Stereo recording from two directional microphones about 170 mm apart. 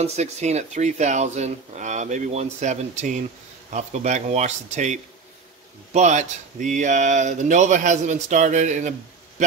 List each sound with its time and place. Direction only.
0.0 s speech: 40° right (ahead or behind)